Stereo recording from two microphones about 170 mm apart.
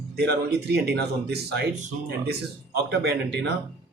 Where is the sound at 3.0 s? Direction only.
90° right.